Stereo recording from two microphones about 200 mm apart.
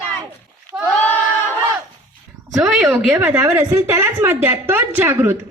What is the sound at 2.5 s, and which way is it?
A woman's voice, 5° right (ahead or behind).